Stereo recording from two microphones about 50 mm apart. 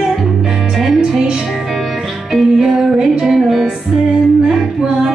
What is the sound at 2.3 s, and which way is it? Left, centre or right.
Music, centre.